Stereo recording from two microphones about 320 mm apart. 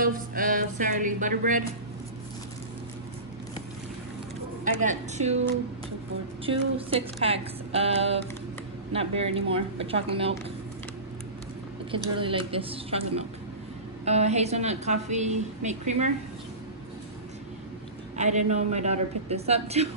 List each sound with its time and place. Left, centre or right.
0.0 s a woman's voice: right
4.7 s a woman's voice: right
6.4 s speech: centre
11.9 s a woman's voice: centre
18.1 s a woman's voice: right